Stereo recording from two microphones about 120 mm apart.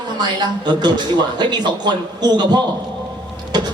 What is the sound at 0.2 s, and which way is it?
Speech, 35° right (ahead or behind).